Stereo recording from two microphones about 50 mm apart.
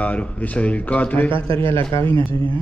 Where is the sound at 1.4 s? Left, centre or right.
Left.